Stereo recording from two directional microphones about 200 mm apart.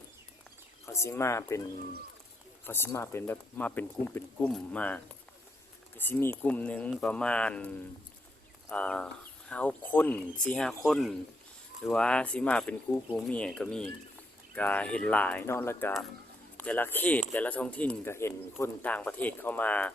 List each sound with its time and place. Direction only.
0.9 s speech: 15° left (ahead or behind)
2.6 s speech: 10° left (ahead or behind)